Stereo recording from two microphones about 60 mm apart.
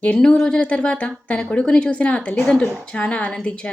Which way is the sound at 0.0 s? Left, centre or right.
Centre.